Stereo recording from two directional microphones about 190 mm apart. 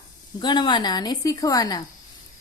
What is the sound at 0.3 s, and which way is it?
A woman's voice, 25° left (ahead or behind).